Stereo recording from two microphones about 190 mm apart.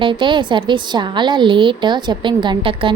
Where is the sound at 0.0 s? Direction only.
25° right (ahead or behind).